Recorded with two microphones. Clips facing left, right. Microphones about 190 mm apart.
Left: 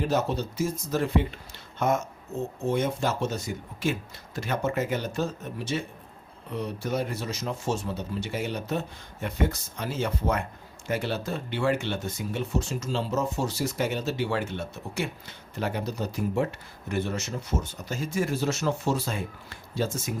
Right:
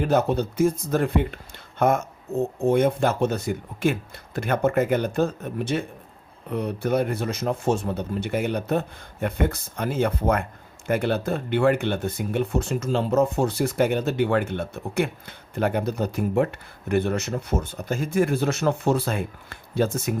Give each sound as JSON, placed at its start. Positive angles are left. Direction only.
{"t": 0.1, "sound": "speech", "side_deg": -55}